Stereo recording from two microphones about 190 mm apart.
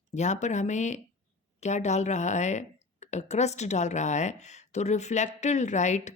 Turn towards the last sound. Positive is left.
turn(degrees=40)  # may be behind; listen again after turning